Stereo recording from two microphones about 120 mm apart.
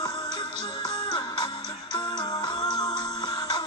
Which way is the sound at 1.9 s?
35° left (ahead or behind).